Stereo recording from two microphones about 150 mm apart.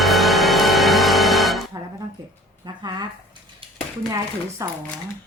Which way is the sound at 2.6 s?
30° right (ahead or behind).